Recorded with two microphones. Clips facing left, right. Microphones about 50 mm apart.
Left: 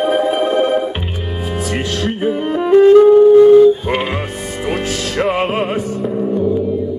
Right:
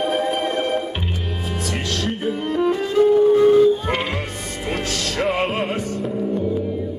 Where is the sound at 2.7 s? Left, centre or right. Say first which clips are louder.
Left 15 dB; left.